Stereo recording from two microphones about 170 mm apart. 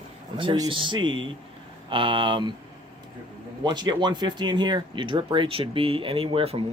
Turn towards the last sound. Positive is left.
turn(degrees=-35)  # may be behind; listen again after turning